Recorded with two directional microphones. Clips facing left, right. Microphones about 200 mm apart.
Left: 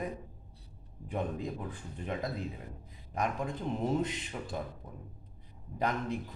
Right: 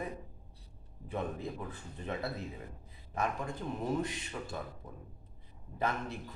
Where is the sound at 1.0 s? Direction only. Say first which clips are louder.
Left 2 dB; 15° left (ahead or behind).